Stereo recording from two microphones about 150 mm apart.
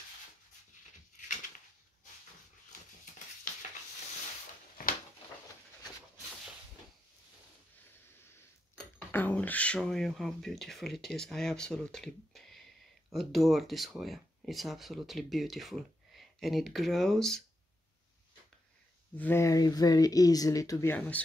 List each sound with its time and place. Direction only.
4.8 s a sound: 70° left (ahead or behind)
8.7 s speech: 10° left (ahead or behind)
19.1 s speech: 15° left (ahead or behind)